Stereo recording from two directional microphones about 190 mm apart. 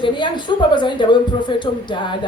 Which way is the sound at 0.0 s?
25° left (ahead or behind).